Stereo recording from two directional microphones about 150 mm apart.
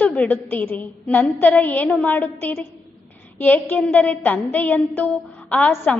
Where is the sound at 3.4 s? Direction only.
10° left (ahead or behind).